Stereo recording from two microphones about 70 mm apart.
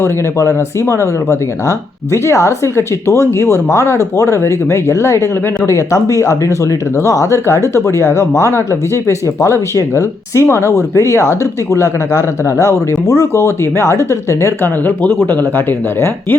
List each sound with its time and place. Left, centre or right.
0.0 s speech: left
14.6 s speech: left